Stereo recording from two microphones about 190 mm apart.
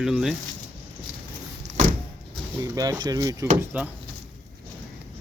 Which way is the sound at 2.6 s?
20° right (ahead or behind).